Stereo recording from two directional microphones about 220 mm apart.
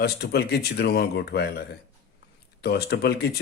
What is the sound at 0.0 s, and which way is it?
Speech, 45° left (ahead or behind).